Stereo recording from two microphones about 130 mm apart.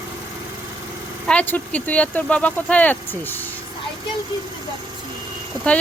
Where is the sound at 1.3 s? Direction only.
10° left (ahead or behind).